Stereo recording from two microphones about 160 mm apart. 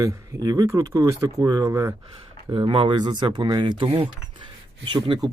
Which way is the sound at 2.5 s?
35° right (ahead or behind).